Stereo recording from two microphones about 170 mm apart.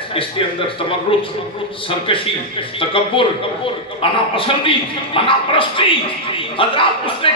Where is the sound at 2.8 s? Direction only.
30° left (ahead or behind).